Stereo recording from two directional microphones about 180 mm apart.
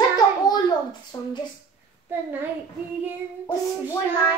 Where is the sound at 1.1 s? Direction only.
20° left (ahead or behind).